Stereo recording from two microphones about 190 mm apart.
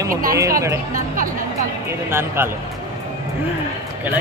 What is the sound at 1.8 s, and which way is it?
Speech, 15° right (ahead or behind).